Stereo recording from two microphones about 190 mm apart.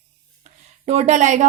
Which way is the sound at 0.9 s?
35° right (ahead or behind).